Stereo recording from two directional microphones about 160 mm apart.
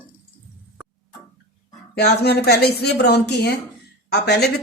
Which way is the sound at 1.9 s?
90° left.